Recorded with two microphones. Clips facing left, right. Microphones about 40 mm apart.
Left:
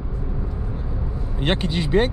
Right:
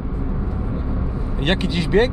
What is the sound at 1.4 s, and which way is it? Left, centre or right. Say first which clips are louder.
Speech: right 1 dB; right.